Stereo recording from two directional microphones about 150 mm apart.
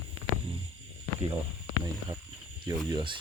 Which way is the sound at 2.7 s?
30° right (ahead or behind).